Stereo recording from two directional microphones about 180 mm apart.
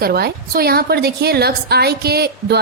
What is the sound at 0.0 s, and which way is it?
A woman's voice, 60° right (ahead or behind).